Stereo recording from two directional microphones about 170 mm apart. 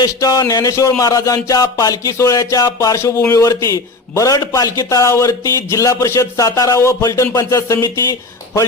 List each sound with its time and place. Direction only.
0.0 s music: 20° left (ahead or behind)